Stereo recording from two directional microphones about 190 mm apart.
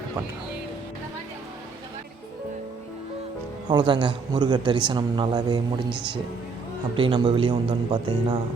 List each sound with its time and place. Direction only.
3.7 s a man's voice: 25° right (ahead or behind)
6.9 s a man's voice: 25° right (ahead or behind)